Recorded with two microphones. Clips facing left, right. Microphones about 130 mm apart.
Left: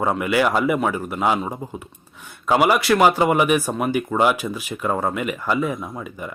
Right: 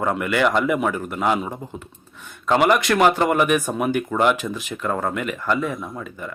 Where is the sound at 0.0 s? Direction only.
5° left (ahead or behind).